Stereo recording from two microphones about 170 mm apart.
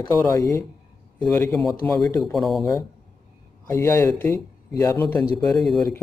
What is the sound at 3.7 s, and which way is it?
Speech, 15° left (ahead or behind).